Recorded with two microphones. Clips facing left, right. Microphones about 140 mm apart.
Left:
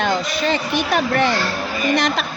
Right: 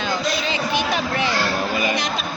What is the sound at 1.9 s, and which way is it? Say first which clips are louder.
Speech: left 6 dB; 70° left (ahead or behind).